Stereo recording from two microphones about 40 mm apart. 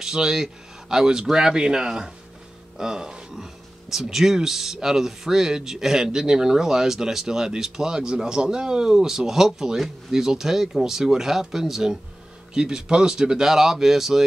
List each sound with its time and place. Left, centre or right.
0.0 s speech: centre
3.9 s speech: centre